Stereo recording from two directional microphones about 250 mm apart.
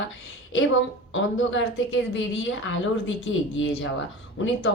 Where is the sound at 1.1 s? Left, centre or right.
Left.